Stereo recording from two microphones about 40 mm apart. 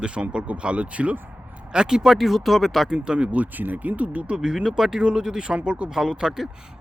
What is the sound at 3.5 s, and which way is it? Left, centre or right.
Speech, right.